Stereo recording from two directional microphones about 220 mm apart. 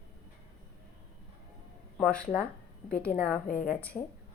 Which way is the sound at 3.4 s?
40° left (ahead or behind).